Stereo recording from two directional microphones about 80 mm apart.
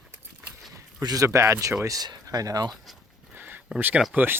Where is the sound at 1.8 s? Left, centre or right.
Right.